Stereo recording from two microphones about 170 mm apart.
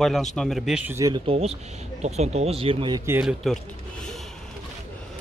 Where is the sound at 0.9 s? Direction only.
20° right (ahead or behind).